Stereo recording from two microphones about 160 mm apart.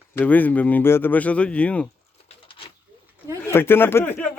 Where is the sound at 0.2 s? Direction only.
10° left (ahead or behind).